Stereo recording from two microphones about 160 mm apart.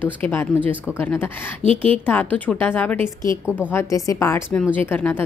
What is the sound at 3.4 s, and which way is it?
Speech, 10° right (ahead or behind).